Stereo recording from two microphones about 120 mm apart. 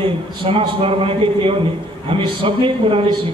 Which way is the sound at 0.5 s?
50° right (ahead or behind).